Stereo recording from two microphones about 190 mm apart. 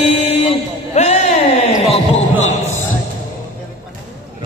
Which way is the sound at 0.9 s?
35° left (ahead or behind).